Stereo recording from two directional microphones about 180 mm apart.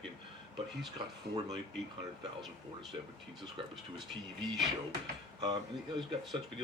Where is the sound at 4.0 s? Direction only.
Centre (ahead or behind).